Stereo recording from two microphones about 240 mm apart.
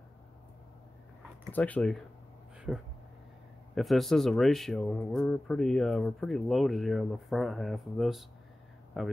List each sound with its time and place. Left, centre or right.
1.5 s speech: centre